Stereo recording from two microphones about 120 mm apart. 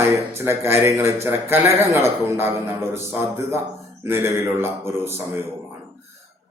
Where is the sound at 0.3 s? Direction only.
20° right (ahead or behind).